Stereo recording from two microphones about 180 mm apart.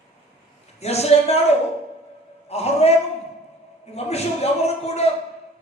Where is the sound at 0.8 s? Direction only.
35° left (ahead or behind).